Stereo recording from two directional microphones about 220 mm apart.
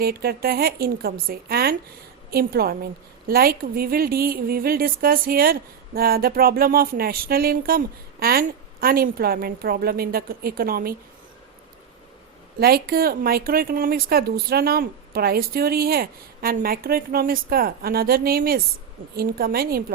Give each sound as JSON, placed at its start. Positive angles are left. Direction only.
{"t": 0.0, "sound": "a woman's voice", "side_deg": -45}
{"t": 12.5, "sound": "a woman's voice", "side_deg": -45}